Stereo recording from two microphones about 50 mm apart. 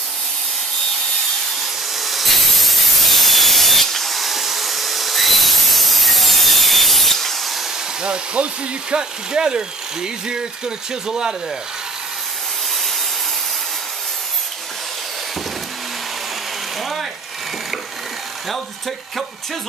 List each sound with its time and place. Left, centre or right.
2.0 s wood: centre
8.0 s speech: centre
18.5 s speech: centre